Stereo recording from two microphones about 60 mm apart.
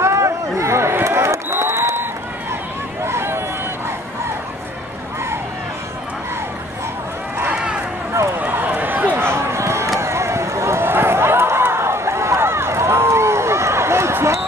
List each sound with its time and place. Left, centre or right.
0.0 s a sound: right
1.0 s run: right
3.1 s run: right
7.5 s run: centre
8.4 s a sound: right
9.9 s run: right